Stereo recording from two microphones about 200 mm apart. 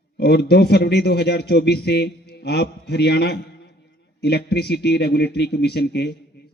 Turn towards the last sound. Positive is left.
turn(degrees=55)  # may be behind; listen again after turning